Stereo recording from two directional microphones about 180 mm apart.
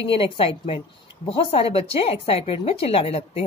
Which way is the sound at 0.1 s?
30° left (ahead or behind).